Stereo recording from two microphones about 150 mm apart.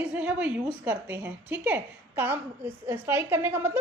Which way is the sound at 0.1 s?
10° right (ahead or behind).